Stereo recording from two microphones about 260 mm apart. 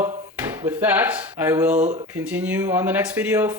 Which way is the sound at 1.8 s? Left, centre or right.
Right.